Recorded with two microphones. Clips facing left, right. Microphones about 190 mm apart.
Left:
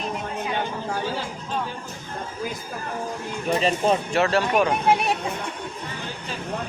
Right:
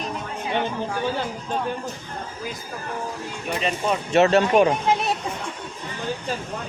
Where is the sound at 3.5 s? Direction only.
35° left (ahead or behind).